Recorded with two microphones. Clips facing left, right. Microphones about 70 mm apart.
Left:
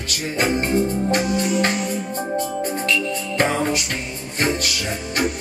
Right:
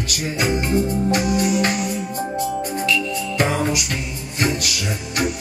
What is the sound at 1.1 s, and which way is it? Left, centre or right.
Music, centre.